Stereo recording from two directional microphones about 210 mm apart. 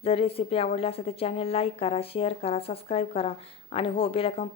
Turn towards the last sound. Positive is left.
turn(degrees=25)  # may be behind; listen again after turning